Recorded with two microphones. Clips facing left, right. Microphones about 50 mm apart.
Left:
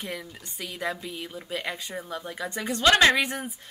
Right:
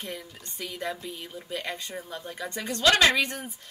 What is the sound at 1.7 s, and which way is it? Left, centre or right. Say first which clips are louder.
A woman's voice: left 2 dB; centre.